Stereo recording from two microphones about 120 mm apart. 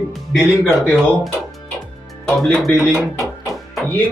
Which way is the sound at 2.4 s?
Centre (ahead or behind).